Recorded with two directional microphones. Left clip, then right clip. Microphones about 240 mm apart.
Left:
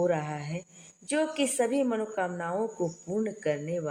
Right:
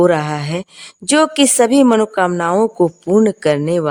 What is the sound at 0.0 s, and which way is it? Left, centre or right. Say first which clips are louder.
Speech: right 15 dB; right.